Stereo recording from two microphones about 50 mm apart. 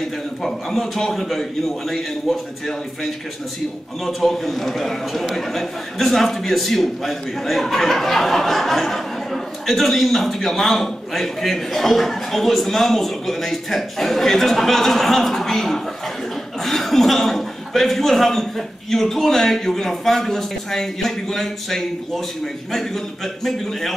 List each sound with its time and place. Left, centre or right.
0.4 s a man's voice: centre